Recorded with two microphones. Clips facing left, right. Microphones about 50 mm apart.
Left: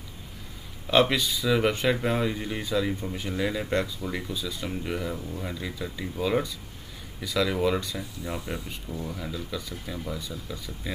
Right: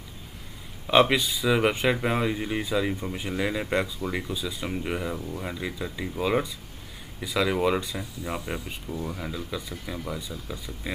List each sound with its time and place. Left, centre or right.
0.8 s speech: centre
10.0 s speech: right